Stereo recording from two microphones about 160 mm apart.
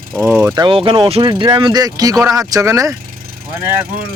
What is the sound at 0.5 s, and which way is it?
Speech, 30° right (ahead or behind).